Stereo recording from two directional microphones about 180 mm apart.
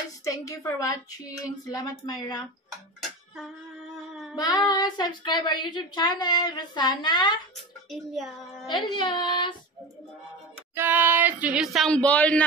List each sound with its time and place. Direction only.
0.2 s speech: 15° left (ahead or behind)
3.0 s a sound: centre (ahead or behind)
4.4 s speech: 20° left (ahead or behind)
7.9 s speech: centre (ahead or behind)
8.6 s speech: 25° left (ahead or behind)
10.7 s speech: 10° right (ahead or behind); by 12.4 s 5° left (ahead or behind)